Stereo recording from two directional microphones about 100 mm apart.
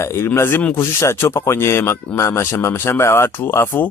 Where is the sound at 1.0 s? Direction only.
30° left (ahead or behind).